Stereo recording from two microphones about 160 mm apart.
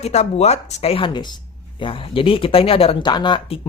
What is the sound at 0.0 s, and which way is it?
Speech, 40° left (ahead or behind).